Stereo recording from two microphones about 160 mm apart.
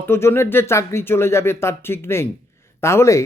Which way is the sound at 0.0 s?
15° left (ahead or behind).